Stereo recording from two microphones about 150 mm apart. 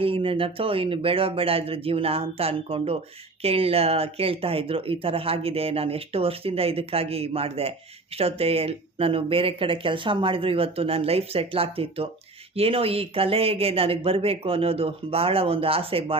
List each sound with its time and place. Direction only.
0.0 s speech: 35° right (ahead or behind)